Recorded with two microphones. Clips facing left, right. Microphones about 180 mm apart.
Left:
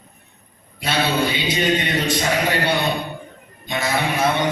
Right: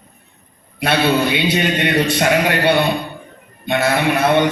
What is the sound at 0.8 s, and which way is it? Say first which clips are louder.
A man's voice: right 5 dB; 65° right (ahead or behind).